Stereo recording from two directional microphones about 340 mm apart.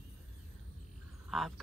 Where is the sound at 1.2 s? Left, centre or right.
Centre.